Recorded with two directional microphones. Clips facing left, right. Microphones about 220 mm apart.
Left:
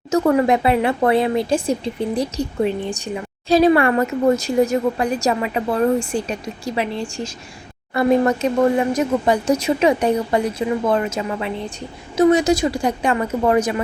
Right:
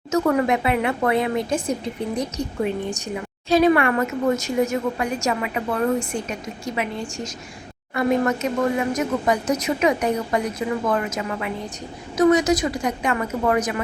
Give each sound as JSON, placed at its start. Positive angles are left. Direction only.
{"t": 0.1, "sound": "speech", "side_deg": 30}